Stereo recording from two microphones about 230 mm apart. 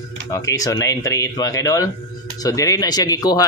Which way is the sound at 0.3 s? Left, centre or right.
Centre.